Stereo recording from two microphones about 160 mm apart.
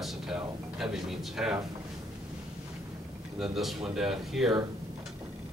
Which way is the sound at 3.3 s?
Centre (ahead or behind).